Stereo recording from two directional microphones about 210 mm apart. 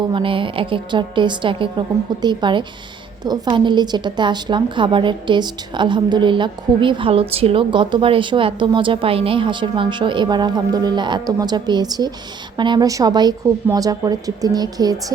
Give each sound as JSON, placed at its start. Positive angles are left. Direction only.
{"t": 0.1, "sound": "a woman's voice", "side_deg": -25}